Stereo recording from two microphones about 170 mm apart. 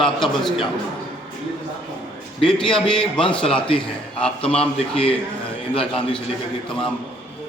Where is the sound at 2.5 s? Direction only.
5° left (ahead or behind).